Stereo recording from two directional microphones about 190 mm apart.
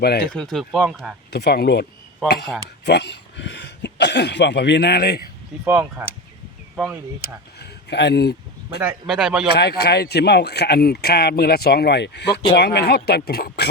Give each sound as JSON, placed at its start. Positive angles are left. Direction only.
{"t": 0.0, "sound": "speech", "side_deg": 60}
{"t": 0.3, "sound": "speech", "side_deg": 5}
{"t": 1.3, "sound": "speech", "side_deg": 60}
{"t": 5.6, "sound": "speech", "side_deg": -10}
{"t": 7.6, "sound": "a sound", "side_deg": 65}
{"t": 9.0, "sound": "speech", "side_deg": 0}
{"t": 9.5, "sound": "speech", "side_deg": 60}